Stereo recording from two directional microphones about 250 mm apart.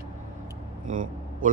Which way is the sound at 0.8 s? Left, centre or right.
Right.